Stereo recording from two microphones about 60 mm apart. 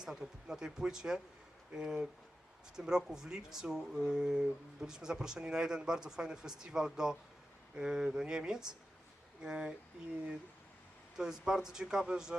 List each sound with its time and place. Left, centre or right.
0.0 s speech: centre
11.2 s speech: centre